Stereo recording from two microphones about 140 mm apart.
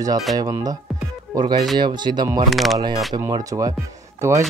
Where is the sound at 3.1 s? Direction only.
25° right (ahead or behind).